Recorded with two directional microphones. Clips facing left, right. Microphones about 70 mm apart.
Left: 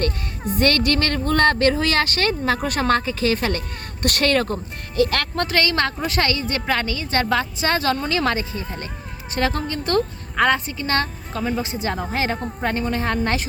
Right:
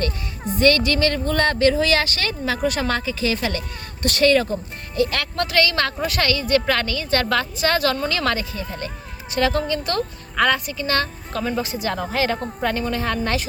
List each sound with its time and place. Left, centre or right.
0.6 s speech: left
5.4 s a woman's voice: left
11.3 s speech: centre
11.6 s a woman's voice: left